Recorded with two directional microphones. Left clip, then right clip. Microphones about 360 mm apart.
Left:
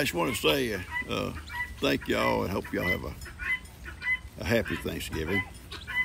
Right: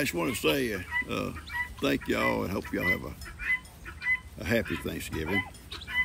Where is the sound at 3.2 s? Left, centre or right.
Left.